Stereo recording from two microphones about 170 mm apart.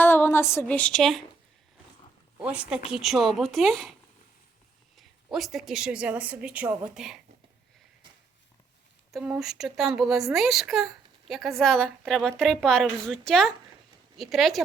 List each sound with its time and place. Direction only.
0.0 s a sound: 10° left (ahead or behind)
2.4 s a woman's voice: 5° right (ahead or behind)
4.9 s a woman's voice: centre (ahead or behind)
9.1 s a woman's voice: 5° right (ahead or behind)